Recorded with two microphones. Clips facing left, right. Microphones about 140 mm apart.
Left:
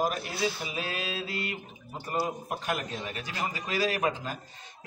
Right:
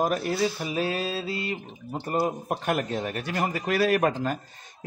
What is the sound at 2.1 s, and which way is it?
Speech, 45° right (ahead or behind).